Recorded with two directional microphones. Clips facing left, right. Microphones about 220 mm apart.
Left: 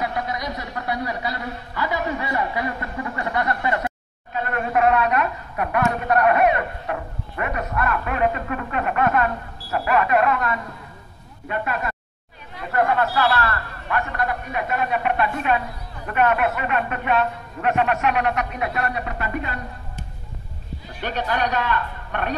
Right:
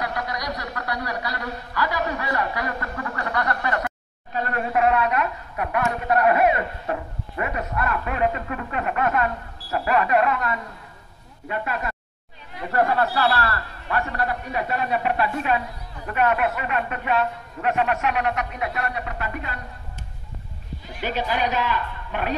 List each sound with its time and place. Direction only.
0.0 s a man's voice: 25° left (ahead or behind)
4.3 s a man's voice: 35° right (ahead or behind)
18.8 s speech: 5° right (ahead or behind)
21.0 s a man's voice: 10° right (ahead or behind)